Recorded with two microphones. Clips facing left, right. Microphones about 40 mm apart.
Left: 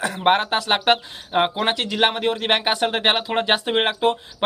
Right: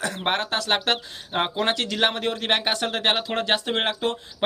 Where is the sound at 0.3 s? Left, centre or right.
Centre.